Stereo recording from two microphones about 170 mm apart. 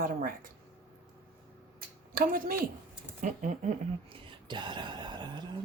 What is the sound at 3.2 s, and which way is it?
Speech, 45° right (ahead or behind).